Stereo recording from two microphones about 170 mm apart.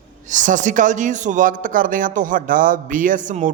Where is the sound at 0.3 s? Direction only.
50° right (ahead or behind).